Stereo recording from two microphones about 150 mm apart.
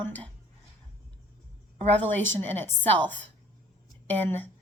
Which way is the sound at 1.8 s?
10° left (ahead or behind).